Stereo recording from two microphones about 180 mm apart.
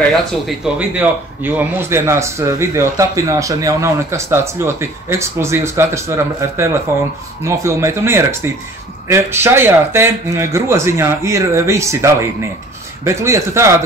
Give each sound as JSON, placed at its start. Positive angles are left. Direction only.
{"t": 0.7, "sound": "speech", "side_deg": -10}